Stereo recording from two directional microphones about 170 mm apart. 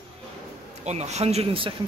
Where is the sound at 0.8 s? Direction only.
40° right (ahead or behind).